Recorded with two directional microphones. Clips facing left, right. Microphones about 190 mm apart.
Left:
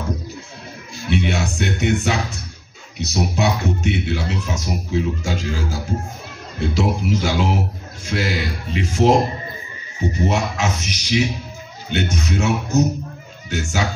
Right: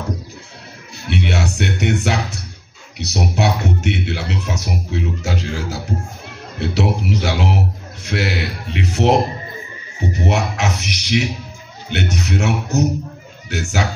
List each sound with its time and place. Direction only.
0.9 s a man's voice: 70° right (ahead or behind)